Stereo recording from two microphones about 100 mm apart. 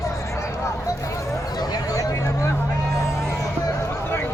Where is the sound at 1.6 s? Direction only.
35° left (ahead or behind).